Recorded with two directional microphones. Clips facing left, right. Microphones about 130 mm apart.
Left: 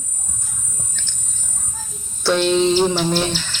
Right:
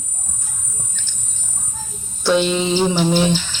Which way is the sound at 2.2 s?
5° right (ahead or behind).